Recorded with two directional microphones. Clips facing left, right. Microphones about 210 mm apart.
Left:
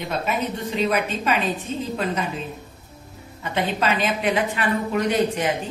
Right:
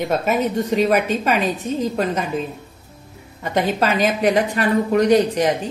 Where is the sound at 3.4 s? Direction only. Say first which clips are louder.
Right 5 dB; 40° right (ahead or behind).